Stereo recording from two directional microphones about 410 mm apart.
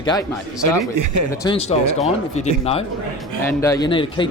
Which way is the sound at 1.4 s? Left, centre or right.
Centre.